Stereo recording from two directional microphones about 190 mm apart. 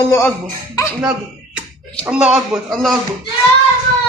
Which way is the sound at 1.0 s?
5° right (ahead or behind).